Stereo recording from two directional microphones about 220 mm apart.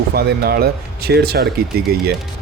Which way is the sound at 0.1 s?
45° right (ahead or behind).